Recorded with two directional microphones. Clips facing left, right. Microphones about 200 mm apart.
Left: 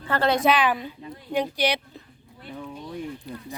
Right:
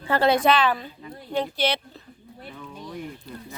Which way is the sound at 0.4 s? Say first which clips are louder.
Right 1 dB; 15° left (ahead or behind).